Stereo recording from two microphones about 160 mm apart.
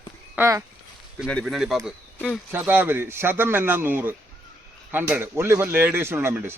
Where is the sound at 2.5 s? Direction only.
10° right (ahead or behind).